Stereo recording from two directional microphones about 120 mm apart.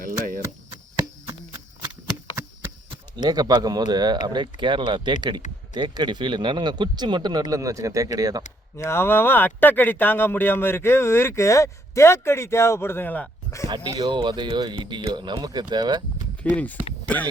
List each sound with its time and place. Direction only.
0.0 s a sound: 90° right
1.3 s a sound: 30° right (ahead or behind)
2.9 s speech: 35° right (ahead or behind)
8.7 s speech: 20° left (ahead or behind)
13.7 s speech: 35° right (ahead or behind)
16.4 s speech: 10° left (ahead or behind)